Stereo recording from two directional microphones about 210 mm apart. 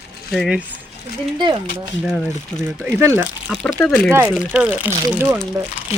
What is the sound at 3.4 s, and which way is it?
Speech, 5° left (ahead or behind).